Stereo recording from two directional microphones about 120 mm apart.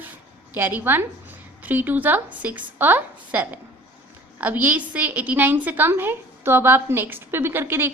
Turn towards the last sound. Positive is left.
turn(degrees=-20)  # may be behind; listen again after turning